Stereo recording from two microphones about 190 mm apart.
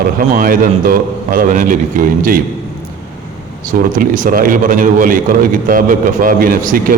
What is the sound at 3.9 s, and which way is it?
A man's voice, 45° right (ahead or behind).